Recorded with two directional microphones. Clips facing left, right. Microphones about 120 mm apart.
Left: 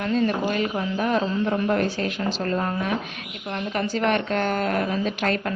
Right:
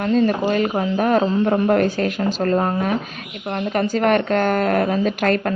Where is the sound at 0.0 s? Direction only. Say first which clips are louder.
Right 5 dB; 40° right (ahead or behind).